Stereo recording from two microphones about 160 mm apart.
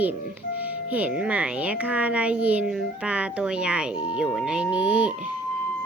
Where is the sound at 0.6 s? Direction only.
10° right (ahead or behind).